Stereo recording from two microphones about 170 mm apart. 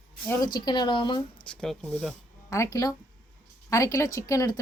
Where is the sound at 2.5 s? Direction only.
15° left (ahead or behind).